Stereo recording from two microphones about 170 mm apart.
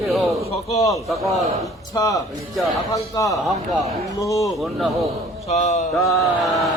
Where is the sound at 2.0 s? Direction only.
20° left (ahead or behind).